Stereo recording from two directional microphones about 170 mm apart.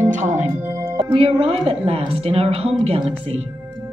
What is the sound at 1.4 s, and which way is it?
A woman's voice, 35° right (ahead or behind).